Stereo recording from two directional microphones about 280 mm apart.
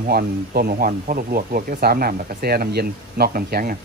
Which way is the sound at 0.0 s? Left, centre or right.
Right.